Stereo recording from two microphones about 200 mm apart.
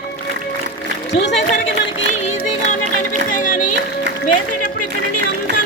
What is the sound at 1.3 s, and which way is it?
Speech, 35° left (ahead or behind).